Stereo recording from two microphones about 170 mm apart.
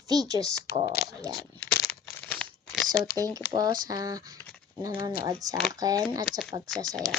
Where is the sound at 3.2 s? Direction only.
20° right (ahead or behind).